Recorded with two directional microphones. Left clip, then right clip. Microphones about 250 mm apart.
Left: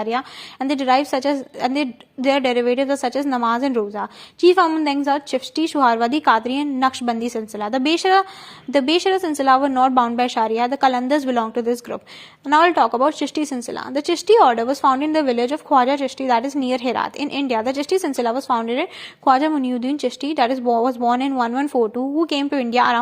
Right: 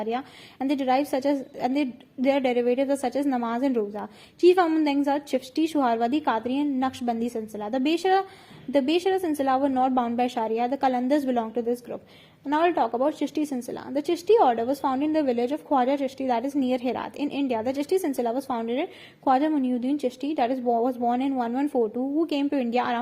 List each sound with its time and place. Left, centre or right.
0.0 s a woman's voice: centre
21.7 s speech: left
22.2 s speech: centre